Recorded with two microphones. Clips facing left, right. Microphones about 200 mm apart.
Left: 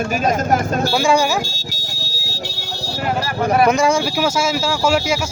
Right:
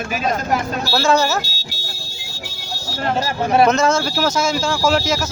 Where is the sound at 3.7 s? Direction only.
10° left (ahead or behind).